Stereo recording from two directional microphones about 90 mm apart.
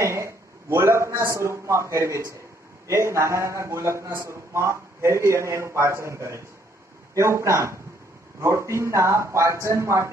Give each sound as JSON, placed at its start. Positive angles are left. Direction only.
{"t": 0.0, "sound": "a man's voice", "side_deg": -30}